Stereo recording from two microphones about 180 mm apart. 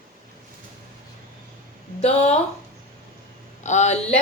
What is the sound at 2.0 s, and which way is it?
Speech, 35° left (ahead or behind).